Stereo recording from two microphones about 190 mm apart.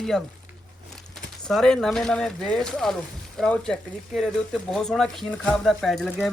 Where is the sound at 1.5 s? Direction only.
5° left (ahead or behind).